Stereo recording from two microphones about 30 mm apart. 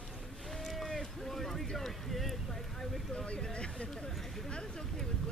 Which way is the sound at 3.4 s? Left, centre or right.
Left.